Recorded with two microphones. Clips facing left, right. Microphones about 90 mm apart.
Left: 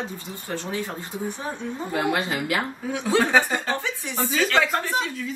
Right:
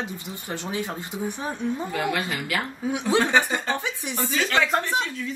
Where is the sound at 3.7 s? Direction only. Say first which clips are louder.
Even; 15° right (ahead or behind).